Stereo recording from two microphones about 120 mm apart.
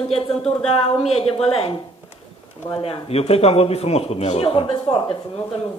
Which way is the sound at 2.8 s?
55° left (ahead or behind).